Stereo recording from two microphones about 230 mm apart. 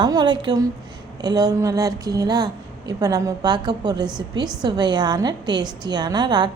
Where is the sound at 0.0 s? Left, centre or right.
Centre.